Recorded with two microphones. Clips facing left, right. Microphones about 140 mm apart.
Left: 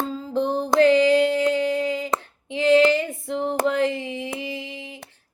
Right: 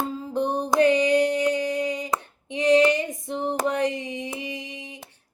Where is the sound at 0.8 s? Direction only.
15° right (ahead or behind).